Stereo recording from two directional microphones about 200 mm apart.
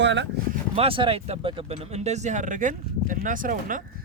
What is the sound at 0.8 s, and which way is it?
Speech, 25° right (ahead or behind).